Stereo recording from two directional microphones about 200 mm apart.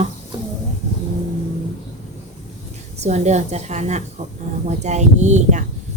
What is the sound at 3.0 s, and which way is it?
A woman's voice, 35° right (ahead or behind).